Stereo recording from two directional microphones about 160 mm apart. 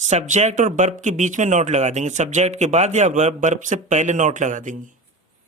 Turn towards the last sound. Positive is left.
turn(degrees=-50)  # may be behind; listen again after turning